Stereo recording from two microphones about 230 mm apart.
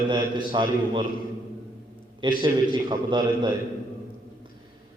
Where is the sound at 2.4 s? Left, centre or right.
Centre.